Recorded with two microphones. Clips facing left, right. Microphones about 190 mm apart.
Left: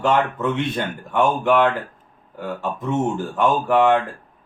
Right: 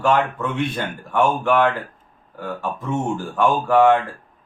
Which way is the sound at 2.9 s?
20° left (ahead or behind).